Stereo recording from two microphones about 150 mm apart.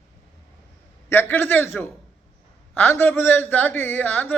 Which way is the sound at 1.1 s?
15° left (ahead or behind).